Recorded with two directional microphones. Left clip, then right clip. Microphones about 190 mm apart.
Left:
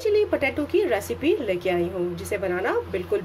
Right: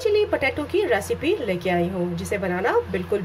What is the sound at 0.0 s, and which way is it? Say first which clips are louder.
A woman's voice: right 1 dB; 5° left (ahead or behind).